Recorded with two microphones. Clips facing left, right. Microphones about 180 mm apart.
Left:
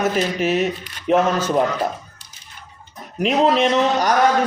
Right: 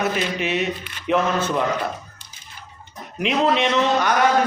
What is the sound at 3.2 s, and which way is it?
Speech, 40° left (ahead or behind).